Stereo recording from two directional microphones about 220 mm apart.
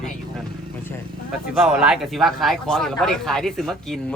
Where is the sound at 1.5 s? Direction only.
5° right (ahead or behind).